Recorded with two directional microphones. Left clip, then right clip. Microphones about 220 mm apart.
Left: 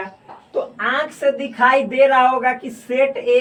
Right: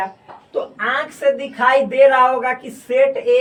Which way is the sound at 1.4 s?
Centre (ahead or behind).